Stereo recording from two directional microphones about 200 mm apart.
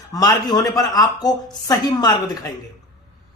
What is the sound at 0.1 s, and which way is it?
Speech, 20° left (ahead or behind).